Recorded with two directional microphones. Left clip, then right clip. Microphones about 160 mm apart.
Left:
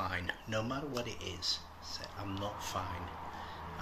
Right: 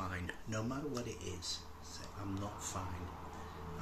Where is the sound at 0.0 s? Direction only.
15° right (ahead or behind).